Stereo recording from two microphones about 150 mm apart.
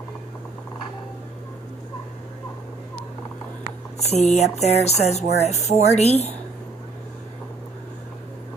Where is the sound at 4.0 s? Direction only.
45° left (ahead or behind).